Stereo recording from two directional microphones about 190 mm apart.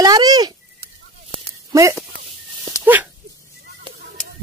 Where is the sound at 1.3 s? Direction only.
15° right (ahead or behind).